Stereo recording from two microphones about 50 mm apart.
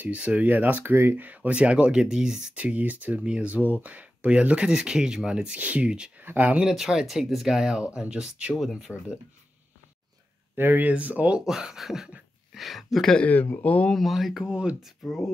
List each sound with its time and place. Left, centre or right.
0.1 s speech: right
0.5 s speech: right; by 2.5 s centre
2.5 s speech: right
5.6 s speech: right
6.2 s speech: right
6.7 s speech: centre
7.8 s speech: right
8.5 s speech: centre
10.5 s speech: right
10.9 s speech: right
11.4 s speech: centre
13.2 s speech: left
13.9 s speech: centre
15.0 s speech: centre